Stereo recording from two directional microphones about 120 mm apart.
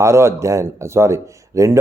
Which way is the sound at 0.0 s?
25° right (ahead or behind).